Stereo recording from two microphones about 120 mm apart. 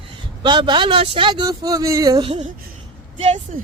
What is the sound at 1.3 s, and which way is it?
Speech, 35° right (ahead or behind).